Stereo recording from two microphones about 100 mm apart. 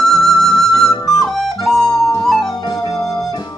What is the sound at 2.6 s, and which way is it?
Music, 40° left (ahead or behind).